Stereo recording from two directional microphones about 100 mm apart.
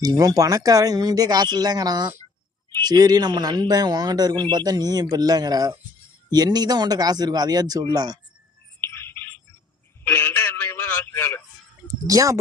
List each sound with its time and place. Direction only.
0.0 s speech: 40° right (ahead or behind)
8.8 s a sound: 25° left (ahead or behind)
11.9 s speech: 35° right (ahead or behind)